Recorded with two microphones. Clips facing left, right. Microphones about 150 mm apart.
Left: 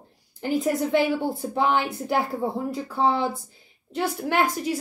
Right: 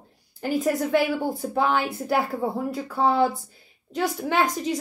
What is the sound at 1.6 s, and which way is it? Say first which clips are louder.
A woman's voice: even; 20° left (ahead or behind).